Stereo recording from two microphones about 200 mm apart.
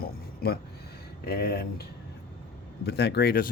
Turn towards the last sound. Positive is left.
turn(degrees=50)  # may be behind; listen again after turning